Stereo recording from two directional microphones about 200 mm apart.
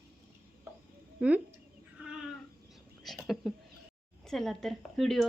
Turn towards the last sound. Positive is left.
turn(degrees=0)  # may be behind; listen again after turning